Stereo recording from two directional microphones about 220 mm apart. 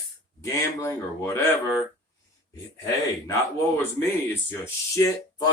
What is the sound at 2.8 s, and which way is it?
Speech, 15° left (ahead or behind).